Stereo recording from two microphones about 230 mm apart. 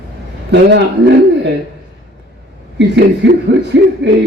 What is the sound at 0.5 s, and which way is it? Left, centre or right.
A man's voice, right.